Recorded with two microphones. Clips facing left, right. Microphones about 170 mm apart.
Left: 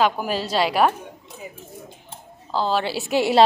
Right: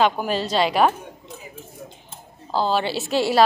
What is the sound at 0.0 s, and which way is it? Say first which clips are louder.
Speech: right 1 dB; 5° left (ahead or behind).